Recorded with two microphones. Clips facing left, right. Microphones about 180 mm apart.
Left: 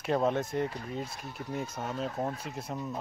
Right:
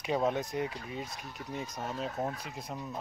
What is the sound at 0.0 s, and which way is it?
Speech, centre (ahead or behind).